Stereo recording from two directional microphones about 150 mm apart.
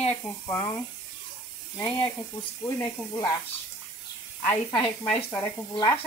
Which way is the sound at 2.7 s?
20° left (ahead or behind).